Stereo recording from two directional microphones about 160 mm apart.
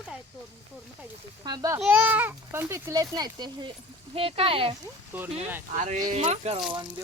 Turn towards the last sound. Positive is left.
turn(degrees=-45)  # may be behind; listen again after turning